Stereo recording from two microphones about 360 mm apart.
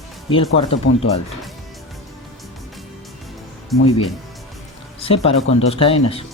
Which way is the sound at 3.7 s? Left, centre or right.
Centre.